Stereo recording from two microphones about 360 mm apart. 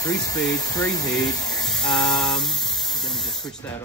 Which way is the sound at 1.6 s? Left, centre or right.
Centre.